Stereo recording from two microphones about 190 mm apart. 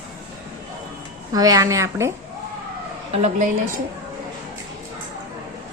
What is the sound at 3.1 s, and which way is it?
Speech, 40° right (ahead or behind).